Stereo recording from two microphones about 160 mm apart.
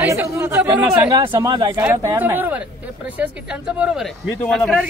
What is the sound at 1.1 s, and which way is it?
Speech, 25° right (ahead or behind).